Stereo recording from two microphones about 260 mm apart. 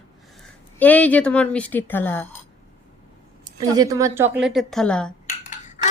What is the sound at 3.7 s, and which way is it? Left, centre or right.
Speech, centre.